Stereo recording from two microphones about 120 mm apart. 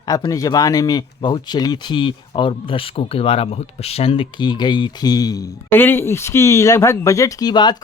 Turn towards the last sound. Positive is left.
turn(degrees=35)  # may be behind; listen again after turning